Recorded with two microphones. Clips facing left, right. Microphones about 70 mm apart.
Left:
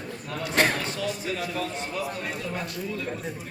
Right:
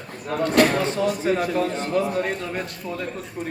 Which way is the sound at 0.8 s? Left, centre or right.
Right.